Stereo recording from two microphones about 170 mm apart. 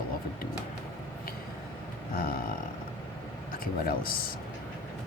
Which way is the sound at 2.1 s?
60° left (ahead or behind).